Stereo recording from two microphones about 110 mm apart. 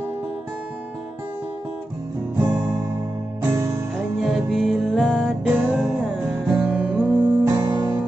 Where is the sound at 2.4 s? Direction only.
20° right (ahead or behind).